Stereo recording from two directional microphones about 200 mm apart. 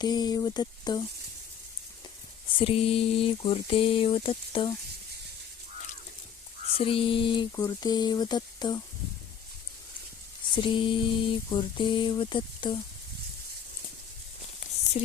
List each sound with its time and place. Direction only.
0.0 s music: 20° left (ahead or behind)
2.6 s music: 30° left (ahead or behind)
6.7 s music: 25° left (ahead or behind)
10.5 s music: 25° left (ahead or behind)